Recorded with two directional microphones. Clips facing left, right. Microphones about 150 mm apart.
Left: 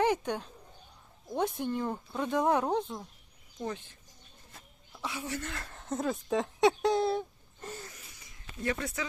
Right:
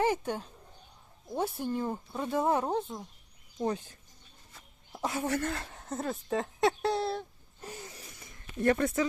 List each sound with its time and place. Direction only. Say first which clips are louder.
0.0 s speech: left 1 dB; 5° right (ahead or behind)
3.6 s speech: right 5 dB; 35° right (ahead or behind); by 5.5 s 55° right (ahead or behind)
5.8 s speech: left 5 dB; centre (ahead or behind)
7.7 s speech: left 1 dB; 15° right (ahead or behind)
8.2 s a sound: right 7 dB; 55° right (ahead or behind)